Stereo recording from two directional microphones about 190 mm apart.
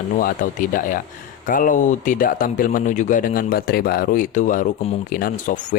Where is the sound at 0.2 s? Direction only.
45° left (ahead or behind).